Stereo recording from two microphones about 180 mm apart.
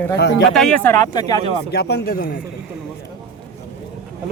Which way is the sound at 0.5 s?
5° left (ahead or behind).